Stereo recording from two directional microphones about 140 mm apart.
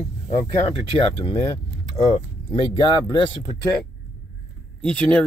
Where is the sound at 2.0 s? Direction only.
30° left (ahead or behind).